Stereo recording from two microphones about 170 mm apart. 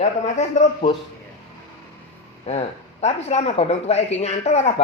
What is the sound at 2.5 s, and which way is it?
Speech, 40° left (ahead or behind).